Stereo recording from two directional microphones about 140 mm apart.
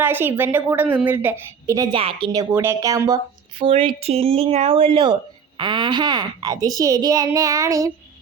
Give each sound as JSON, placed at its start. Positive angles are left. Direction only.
{"t": 0.0, "sound": "a woman's voice", "side_deg": -15}
{"t": 1.9, "sound": "speech", "side_deg": -40}
{"t": 2.4, "sound": "a woman's voice", "side_deg": -15}
{"t": 3.6, "sound": "a woman's voice", "side_deg": -40}